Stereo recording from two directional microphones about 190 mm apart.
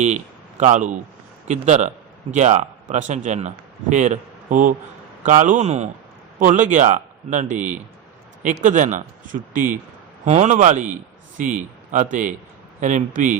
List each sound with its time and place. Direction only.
0.6 s a man's voice: 40° right (ahead or behind)